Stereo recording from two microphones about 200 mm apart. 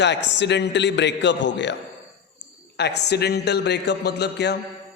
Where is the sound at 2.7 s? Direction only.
55° left (ahead or behind).